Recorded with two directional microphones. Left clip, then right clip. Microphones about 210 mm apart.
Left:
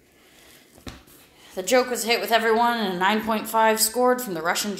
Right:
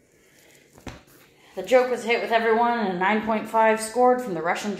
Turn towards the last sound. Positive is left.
turn(degrees=25)  # may be behind; listen again after turning